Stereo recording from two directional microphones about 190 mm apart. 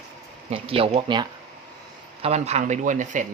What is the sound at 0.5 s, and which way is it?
Speech, 30° right (ahead or behind).